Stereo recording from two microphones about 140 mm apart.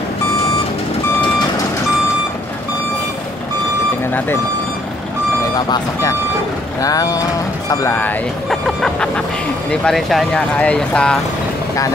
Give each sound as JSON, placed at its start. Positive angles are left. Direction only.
{"t": 6.8, "sound": "speech", "side_deg": 25}
{"t": 8.5, "sound": "music", "side_deg": 5}
{"t": 9.7, "sound": "speech", "side_deg": 5}